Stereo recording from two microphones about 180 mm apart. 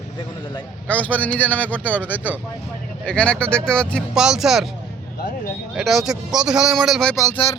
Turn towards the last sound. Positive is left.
turn(degrees=20)  # may be behind; listen again after turning